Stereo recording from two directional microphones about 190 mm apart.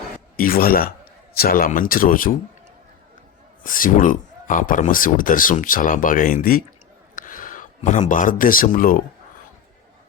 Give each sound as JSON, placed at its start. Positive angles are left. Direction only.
{"t": 0.3, "sound": "speech", "side_deg": 50}
{"t": 3.6, "sound": "speech", "side_deg": 45}